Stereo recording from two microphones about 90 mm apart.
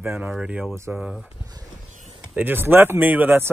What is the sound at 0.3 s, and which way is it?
Speech, 15° right (ahead or behind).